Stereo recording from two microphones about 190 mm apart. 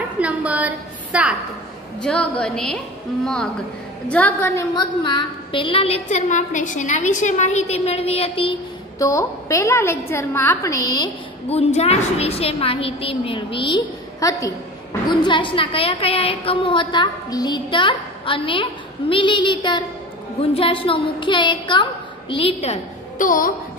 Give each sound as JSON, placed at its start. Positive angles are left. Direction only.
{"t": 0.2, "sound": "a woman's voice", "side_deg": -10}
{"t": 2.0, "sound": "a woman's voice", "side_deg": 5}
{"t": 4.1, "sound": "a woman's voice", "side_deg": 10}
{"t": 4.7, "sound": "a woman's voice", "side_deg": 25}
{"t": 9.1, "sound": "a woman's voice", "side_deg": 15}
{"t": 11.4, "sound": "a woman's voice", "side_deg": 35}